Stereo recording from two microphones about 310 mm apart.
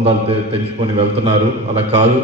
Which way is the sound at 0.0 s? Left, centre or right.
Centre.